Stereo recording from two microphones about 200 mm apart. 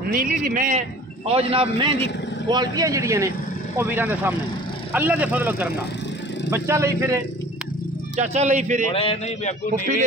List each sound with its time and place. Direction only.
0.1 s a man's voice: 45° right (ahead or behind)
1.3 s a man's voice: 25° right (ahead or behind)
8.2 s speech: 35° right (ahead or behind)
8.9 s speech: 30° left (ahead or behind)